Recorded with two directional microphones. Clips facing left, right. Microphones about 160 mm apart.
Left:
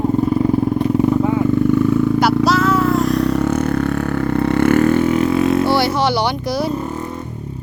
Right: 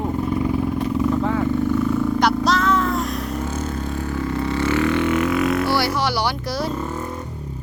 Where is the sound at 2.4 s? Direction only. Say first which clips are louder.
Left 4 dB; 5° left (ahead or behind).